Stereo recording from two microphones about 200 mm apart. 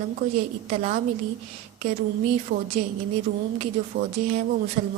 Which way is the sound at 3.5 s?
35° right (ahead or behind).